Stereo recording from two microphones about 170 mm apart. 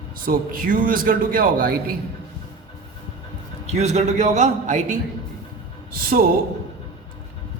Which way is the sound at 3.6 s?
40° right (ahead or behind).